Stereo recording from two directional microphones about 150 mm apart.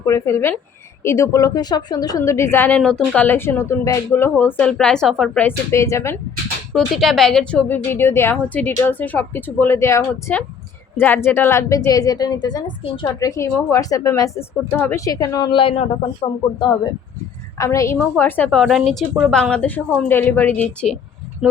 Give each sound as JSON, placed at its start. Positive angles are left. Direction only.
{"t": 0.0, "sound": "a woman's voice", "side_deg": 20}
{"t": 5.4, "sound": "a woman's voice", "side_deg": 15}
{"t": 6.7, "sound": "a woman's voice", "side_deg": 0}
{"t": 13.1, "sound": "a woman's voice", "side_deg": 20}
{"t": 17.6, "sound": "a woman's voice", "side_deg": 20}
{"t": 18.6, "sound": "a woman's voice", "side_deg": 0}
{"t": 21.4, "sound": "a woman's voice", "side_deg": -5}